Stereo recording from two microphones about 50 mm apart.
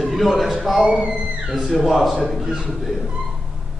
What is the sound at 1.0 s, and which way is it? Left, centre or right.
Speech, centre.